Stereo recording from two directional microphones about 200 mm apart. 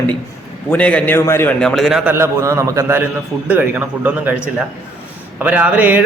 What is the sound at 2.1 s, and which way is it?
A man's voice, 15° right (ahead or behind).